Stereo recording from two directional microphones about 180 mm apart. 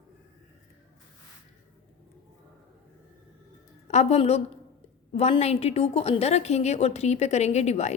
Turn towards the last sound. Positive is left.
turn(degrees=40)  # may be behind; listen again after turning